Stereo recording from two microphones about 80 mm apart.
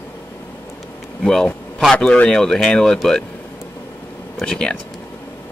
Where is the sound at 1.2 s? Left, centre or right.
Centre.